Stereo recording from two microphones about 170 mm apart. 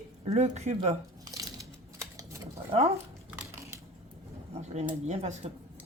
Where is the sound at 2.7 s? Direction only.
35° right (ahead or behind).